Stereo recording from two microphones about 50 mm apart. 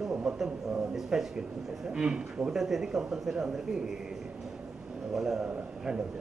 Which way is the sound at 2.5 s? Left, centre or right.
Centre.